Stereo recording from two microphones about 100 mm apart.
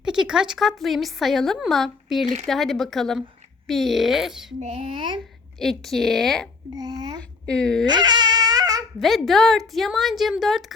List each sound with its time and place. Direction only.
0.0 s a woman's voice: 5° right (ahead or behind)
4.7 s speech: 65° right (ahead or behind)
5.5 s a woman's voice: 5° left (ahead or behind)
6.7 s speech: 40° right (ahead or behind)
7.4 s speech: 5° left (ahead or behind)
7.9 s crying: 45° right (ahead or behind)
9.0 s a woman's voice: centre (ahead or behind)